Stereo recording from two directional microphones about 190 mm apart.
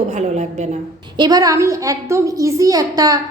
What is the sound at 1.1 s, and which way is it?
A woman's voice, 20° right (ahead or behind).